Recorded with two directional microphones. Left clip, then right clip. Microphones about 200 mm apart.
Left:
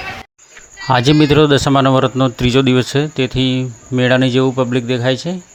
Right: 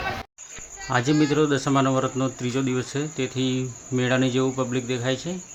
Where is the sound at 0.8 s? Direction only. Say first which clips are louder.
Left 10 dB; 45° left (ahead or behind).